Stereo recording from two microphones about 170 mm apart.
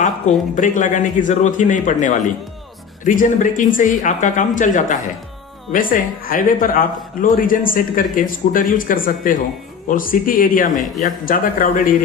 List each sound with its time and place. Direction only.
0.5 s speech: 50° left (ahead or behind)